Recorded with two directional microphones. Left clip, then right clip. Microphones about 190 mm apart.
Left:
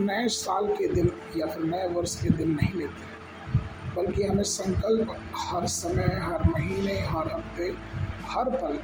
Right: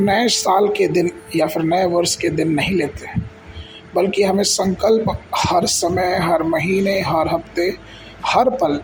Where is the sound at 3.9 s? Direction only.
40° right (ahead or behind).